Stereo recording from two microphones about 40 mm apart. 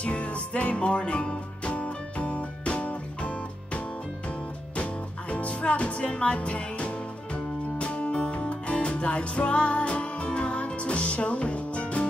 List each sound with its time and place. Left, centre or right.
0.0 s music: left
5.3 s music: left